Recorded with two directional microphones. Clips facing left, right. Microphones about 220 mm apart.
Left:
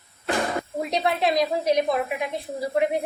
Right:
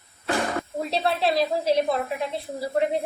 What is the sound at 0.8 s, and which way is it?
A woman's voice, 15° left (ahead or behind).